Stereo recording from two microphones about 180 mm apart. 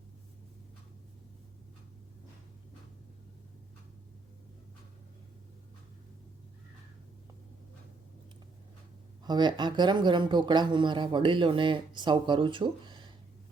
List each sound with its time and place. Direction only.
9.2 s speech: 25° right (ahead or behind)